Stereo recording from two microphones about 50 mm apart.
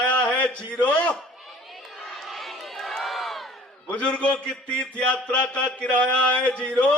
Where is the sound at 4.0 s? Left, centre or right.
Left.